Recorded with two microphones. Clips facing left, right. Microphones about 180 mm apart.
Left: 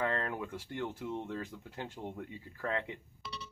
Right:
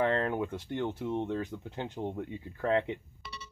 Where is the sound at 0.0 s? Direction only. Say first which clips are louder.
Right 6 dB; 25° right (ahead or behind).